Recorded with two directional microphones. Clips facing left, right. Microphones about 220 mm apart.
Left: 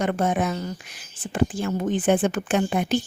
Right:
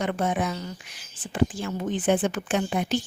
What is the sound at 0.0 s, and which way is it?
Speech, 45° left (ahead or behind).